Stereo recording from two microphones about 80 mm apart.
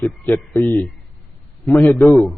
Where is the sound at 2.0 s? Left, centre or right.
Centre.